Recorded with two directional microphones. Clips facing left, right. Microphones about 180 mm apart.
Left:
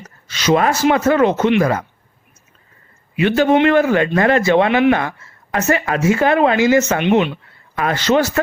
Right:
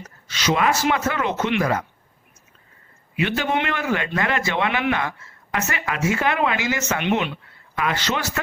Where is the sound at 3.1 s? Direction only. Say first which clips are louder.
Left 9 dB; 40° left (ahead or behind).